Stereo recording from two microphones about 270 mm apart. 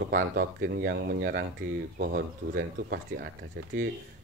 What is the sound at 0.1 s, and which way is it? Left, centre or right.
Speech, right.